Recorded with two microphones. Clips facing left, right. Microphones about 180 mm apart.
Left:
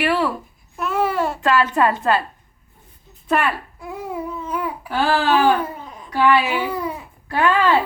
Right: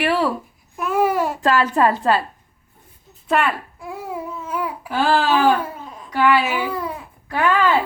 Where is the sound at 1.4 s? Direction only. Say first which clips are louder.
Right 1 dB; 35° right (ahead or behind).